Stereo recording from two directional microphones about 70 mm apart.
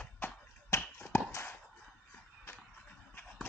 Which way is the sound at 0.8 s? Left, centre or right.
Left.